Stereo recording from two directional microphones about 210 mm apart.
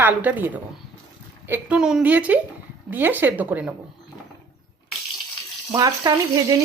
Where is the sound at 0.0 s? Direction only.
10° right (ahead or behind).